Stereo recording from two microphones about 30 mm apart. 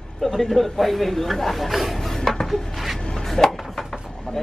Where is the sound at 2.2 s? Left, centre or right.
Centre.